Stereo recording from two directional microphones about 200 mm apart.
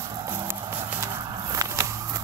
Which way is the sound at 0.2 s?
15° right (ahead or behind).